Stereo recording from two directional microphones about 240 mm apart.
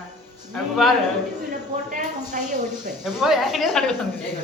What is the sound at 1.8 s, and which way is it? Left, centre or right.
Speech, right.